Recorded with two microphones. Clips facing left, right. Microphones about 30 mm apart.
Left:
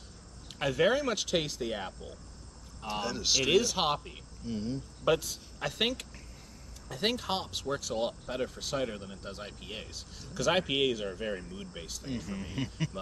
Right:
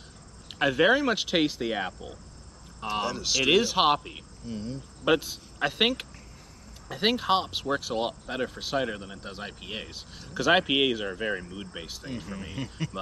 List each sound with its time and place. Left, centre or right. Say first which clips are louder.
0.5 s speech: right 5 dB; right
3.1 s speech: left 1 dB; centre
3.4 s speech: right 7 dB; right
4.5 s speech: even; centre
5.0 s speech: right 4 dB; right
12.5 s speech: even; centre